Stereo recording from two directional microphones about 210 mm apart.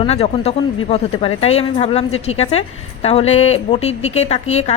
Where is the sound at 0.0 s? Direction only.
30° left (ahead or behind).